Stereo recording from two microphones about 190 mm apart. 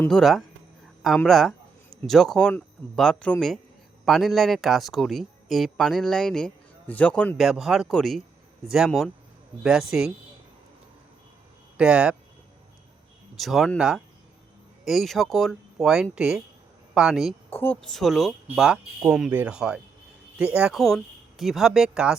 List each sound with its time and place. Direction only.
0.0 s speech: centre (ahead or behind)
11.8 s speech: 5° right (ahead or behind)
13.4 s speech: centre (ahead or behind)
17.5 s speech: 10° left (ahead or behind)